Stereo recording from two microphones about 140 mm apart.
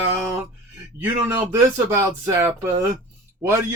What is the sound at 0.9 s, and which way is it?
A man's voice, 15° right (ahead or behind).